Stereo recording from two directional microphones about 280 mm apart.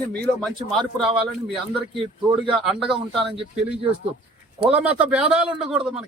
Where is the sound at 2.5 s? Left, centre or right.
Centre.